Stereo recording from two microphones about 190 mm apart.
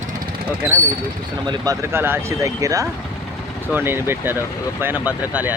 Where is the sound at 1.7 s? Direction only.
10° right (ahead or behind).